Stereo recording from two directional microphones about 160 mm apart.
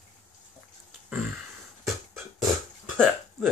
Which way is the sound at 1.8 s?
Centre (ahead or behind).